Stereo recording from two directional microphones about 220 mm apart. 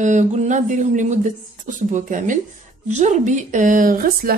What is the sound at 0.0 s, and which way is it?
Speech, 35° right (ahead or behind).